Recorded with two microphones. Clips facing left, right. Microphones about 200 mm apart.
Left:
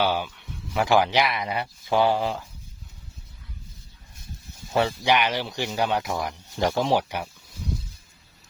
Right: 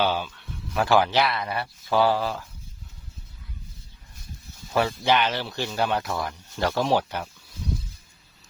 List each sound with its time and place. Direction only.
0.0 s speech: 15° left (ahead or behind)
4.7 s speech: 25° left (ahead or behind)